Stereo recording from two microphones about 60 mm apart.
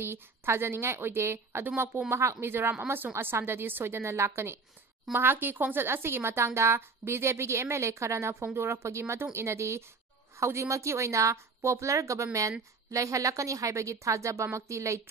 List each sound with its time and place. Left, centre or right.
0.0 s a woman's voice: right
5.1 s a woman's voice: right